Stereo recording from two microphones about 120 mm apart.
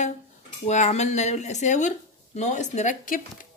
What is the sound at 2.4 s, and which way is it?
Speech, 75° left (ahead or behind).